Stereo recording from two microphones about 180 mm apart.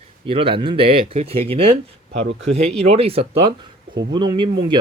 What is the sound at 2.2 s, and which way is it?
Speech, 80° right.